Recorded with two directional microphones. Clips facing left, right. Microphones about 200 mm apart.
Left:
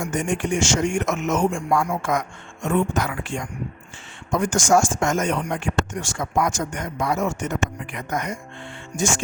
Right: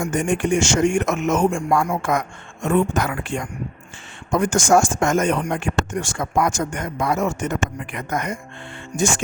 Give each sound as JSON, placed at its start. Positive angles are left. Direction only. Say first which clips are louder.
{"t": 0.1, "sound": "speech", "louder": "right 4 dB", "side_deg": -55}